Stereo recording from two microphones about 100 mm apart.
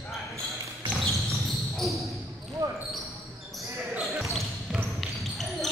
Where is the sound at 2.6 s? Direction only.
40° right (ahead or behind).